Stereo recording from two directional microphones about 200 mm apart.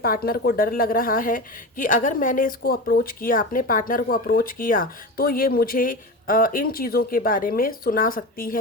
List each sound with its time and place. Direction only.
0.0 s a woman's voice: 50° left (ahead or behind)